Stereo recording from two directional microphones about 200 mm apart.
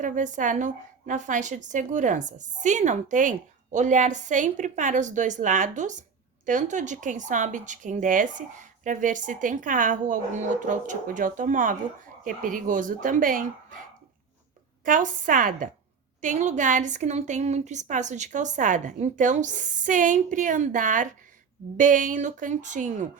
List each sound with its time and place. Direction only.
0.0 s a woman's voice: 40° right (ahead or behind)
14.8 s a woman's voice: 40° right (ahead or behind)